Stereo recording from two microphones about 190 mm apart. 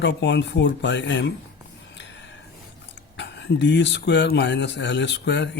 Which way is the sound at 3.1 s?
65° left (ahead or behind).